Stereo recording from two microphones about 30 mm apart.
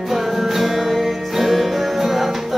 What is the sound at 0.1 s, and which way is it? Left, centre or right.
Music, centre.